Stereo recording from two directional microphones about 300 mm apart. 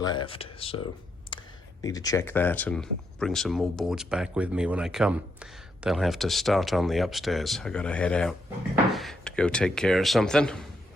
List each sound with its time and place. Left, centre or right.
0.0 s speech: centre
1.3 s a sound: centre
1.8 s speech: centre